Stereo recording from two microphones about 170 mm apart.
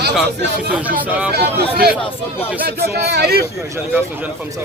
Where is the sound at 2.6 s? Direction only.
65° right (ahead or behind).